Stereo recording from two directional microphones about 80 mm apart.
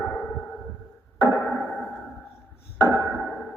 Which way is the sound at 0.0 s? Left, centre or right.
Centre.